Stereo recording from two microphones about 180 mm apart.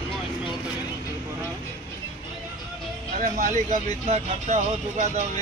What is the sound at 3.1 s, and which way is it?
Speech, 45° right (ahead or behind).